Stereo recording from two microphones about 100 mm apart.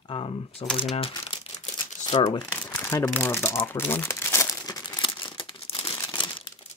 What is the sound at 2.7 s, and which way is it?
Crumpling, 20° left (ahead or behind).